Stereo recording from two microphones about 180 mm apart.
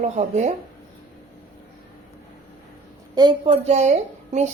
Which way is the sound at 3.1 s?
25° right (ahead or behind).